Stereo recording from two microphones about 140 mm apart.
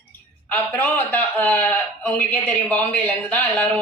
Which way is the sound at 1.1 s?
10° left (ahead or behind).